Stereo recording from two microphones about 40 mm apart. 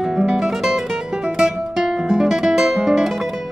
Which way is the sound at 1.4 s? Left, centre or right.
Centre.